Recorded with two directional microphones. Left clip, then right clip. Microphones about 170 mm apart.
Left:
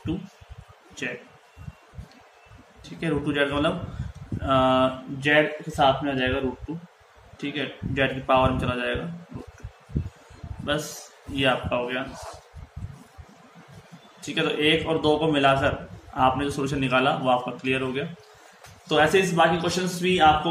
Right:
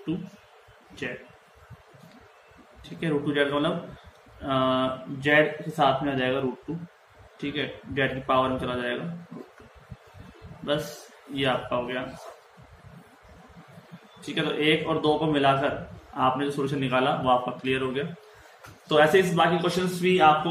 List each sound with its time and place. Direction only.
3.0 s a man's voice: 15° left (ahead or behind)
7.3 s a man's voice: 15° left (ahead or behind)
11.3 s a man's voice: 25° left (ahead or behind)
14.2 s a man's voice: 20° left (ahead or behind)